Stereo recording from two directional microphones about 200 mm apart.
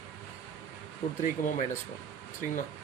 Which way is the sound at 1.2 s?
35° left (ahead or behind).